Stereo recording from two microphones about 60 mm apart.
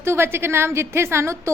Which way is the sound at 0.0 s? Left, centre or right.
Right.